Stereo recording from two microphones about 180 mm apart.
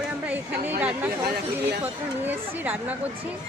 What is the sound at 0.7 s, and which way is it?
Speech, 10° right (ahead or behind).